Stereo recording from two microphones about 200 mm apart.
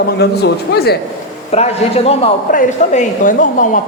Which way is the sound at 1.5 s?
30° left (ahead or behind).